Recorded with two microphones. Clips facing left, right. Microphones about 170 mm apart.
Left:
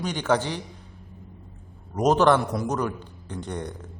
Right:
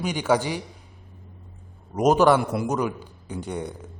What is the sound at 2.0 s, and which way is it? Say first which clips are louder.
A man's voice: right 1 dB; 10° right (ahead or behind).